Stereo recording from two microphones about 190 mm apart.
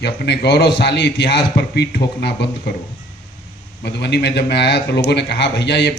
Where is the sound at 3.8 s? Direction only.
60° left (ahead or behind).